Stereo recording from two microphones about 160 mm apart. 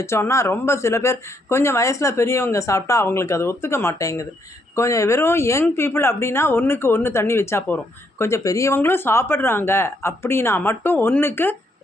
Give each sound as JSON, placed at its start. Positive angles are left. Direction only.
{"t": 0.0, "sound": "speech", "side_deg": 15}